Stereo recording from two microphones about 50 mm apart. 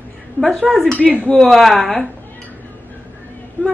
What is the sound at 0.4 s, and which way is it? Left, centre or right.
Speech, centre.